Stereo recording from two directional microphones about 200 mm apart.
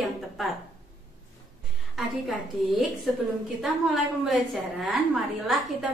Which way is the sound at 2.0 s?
Centre (ahead or behind).